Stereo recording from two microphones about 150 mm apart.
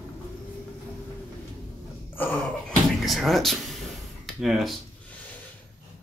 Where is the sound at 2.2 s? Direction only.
15° left (ahead or behind).